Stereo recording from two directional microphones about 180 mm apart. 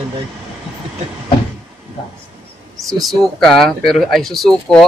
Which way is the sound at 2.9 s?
Centre (ahead or behind).